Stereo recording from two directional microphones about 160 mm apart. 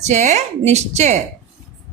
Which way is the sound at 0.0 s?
45° right (ahead or behind).